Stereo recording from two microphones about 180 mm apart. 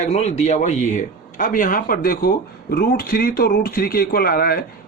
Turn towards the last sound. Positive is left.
turn(degrees=55)  # may be behind; listen again after turning